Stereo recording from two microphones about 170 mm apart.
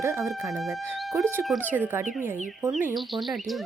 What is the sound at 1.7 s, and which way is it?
Speech, 10° right (ahead or behind).